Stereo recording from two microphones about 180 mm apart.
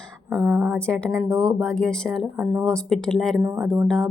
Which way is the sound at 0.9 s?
5° left (ahead or behind).